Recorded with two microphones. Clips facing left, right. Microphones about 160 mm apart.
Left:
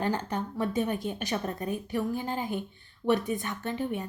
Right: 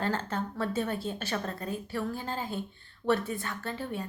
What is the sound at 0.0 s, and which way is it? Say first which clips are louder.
A woman's voice: left 1 dB; 15° left (ahead or behind).